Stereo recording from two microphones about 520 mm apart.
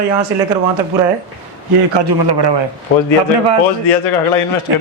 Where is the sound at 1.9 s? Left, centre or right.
Right.